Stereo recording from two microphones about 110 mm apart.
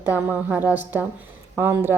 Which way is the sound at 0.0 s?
15° right (ahead or behind).